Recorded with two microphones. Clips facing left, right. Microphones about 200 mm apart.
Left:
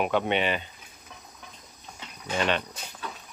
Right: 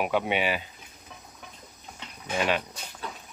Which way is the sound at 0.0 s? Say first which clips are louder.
Left 1 dB; 10° right (ahead or behind).